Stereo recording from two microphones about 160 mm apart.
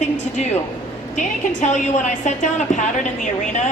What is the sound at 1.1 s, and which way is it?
A woman's voice, 50° left (ahead or behind).